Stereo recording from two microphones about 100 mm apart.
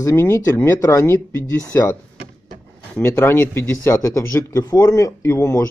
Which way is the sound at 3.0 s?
25° left (ahead or behind).